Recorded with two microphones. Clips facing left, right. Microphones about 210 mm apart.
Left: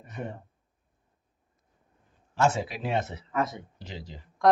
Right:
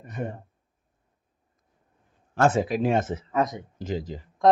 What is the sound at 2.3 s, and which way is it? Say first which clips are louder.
Speech: right 4 dB; 55° right (ahead or behind).